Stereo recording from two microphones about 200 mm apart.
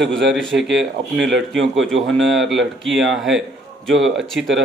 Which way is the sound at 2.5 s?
65° right (ahead or behind).